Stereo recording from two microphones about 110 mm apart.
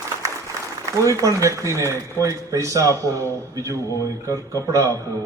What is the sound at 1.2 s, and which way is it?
A man's voice, 30° right (ahead or behind).